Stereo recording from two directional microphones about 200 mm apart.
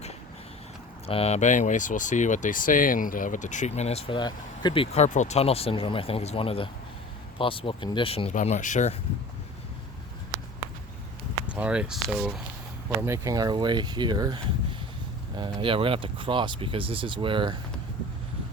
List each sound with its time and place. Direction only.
1.0 s speech: 30° left (ahead or behind)
11.5 s speech: 5° right (ahead or behind)
13.0 s speech: 15° right (ahead or behind)